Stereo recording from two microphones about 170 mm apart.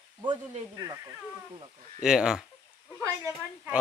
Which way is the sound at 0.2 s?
25° right (ahead or behind).